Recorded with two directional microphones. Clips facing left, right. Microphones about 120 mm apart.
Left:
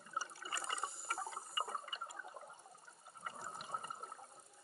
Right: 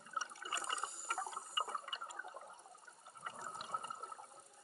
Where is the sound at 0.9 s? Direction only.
Centre (ahead or behind).